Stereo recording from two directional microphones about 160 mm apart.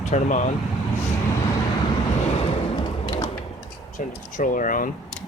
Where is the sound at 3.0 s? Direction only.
25° left (ahead or behind).